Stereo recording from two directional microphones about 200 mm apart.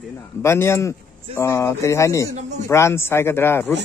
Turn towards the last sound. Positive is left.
turn(degrees=10)  # may be behind; listen again after turning